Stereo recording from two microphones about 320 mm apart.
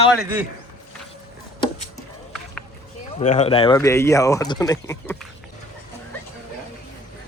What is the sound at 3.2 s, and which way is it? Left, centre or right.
Speech, left.